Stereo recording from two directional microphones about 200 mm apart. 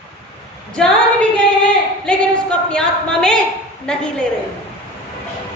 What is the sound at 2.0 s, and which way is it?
A woman's voice, 5° left (ahead or behind).